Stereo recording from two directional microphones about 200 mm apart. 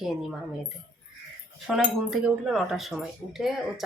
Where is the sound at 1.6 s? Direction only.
Centre (ahead or behind).